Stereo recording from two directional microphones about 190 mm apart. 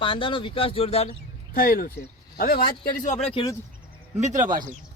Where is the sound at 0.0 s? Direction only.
25° left (ahead or behind).